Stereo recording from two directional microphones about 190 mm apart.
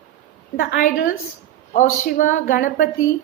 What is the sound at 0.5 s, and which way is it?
A woman's voice, 45° left (ahead or behind).